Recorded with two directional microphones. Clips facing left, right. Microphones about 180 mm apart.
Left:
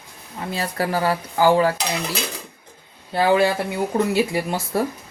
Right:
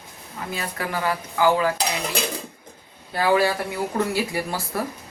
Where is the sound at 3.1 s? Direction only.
25° left (ahead or behind).